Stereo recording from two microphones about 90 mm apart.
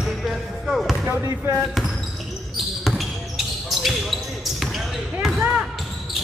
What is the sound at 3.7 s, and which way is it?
Basketball bounce, centre (ahead or behind).